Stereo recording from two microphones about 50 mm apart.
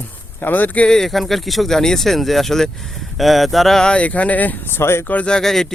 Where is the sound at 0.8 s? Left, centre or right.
Centre.